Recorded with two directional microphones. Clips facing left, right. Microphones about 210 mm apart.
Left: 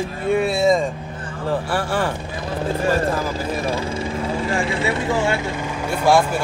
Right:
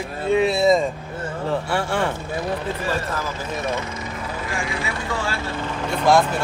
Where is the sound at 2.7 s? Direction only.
30° left (ahead or behind).